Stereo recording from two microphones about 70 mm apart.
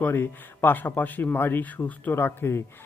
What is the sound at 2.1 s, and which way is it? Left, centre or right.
Speech, left.